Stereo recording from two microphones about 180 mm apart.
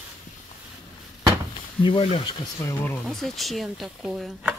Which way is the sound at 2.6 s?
10° left (ahead or behind).